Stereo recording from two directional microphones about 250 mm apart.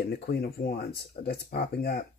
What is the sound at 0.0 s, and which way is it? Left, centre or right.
Speech, left.